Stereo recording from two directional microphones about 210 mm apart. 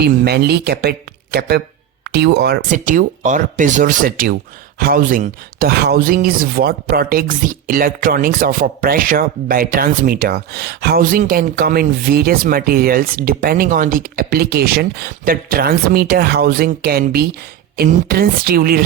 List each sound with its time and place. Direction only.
0.0 s speech: 50° right (ahead or behind)
2.6 s speech: 35° right (ahead or behind)